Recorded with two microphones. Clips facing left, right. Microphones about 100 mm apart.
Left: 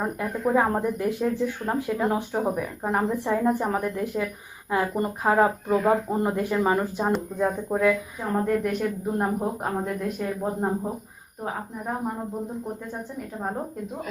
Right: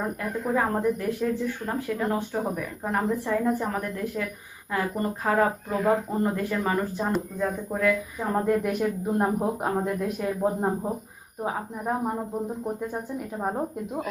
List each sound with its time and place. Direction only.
0.2 s speech: 15° left (ahead or behind)
8.2 s speech: 5° right (ahead or behind)